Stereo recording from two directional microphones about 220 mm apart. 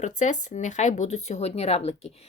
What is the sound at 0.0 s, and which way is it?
Speech, 35° left (ahead or behind).